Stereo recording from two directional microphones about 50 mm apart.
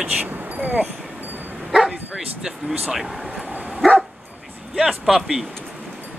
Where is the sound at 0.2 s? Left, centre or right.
Right.